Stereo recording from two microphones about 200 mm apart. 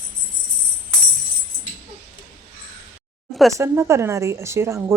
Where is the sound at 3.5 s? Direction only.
15° right (ahead or behind).